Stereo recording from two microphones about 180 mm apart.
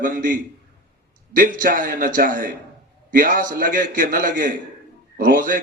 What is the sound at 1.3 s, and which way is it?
A man's voice, 50° right (ahead or behind).